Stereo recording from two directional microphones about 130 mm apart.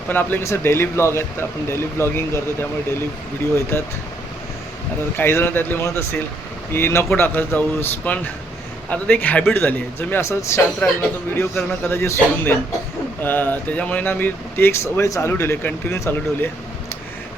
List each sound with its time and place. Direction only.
0.1 s speech: 15° left (ahead or behind)
5.1 s speech: 15° left (ahead or behind)
11.9 s speech: 20° left (ahead or behind)